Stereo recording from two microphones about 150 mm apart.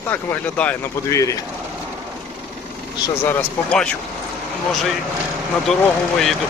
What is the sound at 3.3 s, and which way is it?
Speech, 5° left (ahead or behind).